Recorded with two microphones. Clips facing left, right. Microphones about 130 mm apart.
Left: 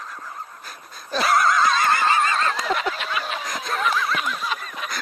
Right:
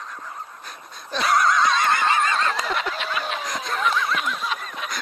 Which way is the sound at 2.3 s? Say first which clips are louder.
Left 1 dB; centre (ahead or behind).